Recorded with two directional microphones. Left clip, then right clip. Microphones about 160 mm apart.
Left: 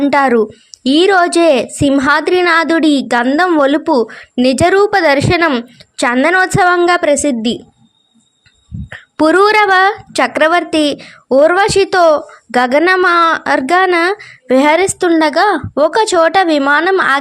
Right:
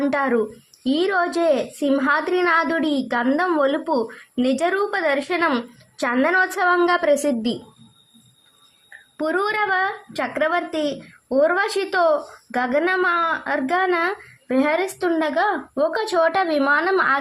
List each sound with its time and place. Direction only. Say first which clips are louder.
0.0 s a woman's voice: left 10 dB; 35° left (ahead or behind)
9.1 s a woman's voice: left 13 dB; 50° left (ahead or behind); by 17.2 s 30° left (ahead or behind)